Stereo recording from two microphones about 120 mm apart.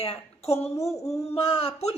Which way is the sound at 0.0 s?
60° left (ahead or behind).